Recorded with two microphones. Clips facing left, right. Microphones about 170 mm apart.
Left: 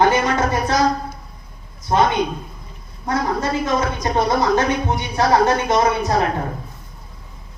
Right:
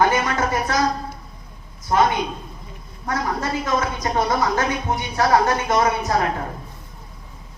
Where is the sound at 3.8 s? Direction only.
30° left (ahead or behind).